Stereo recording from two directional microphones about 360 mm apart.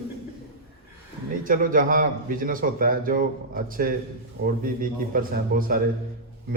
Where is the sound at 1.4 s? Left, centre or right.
Right.